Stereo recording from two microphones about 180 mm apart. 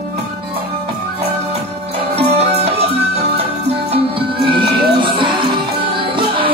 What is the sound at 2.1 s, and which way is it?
Music, 35° right (ahead or behind).